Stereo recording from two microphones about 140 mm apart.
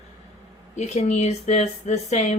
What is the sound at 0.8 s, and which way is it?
Speech, 55° left (ahead or behind).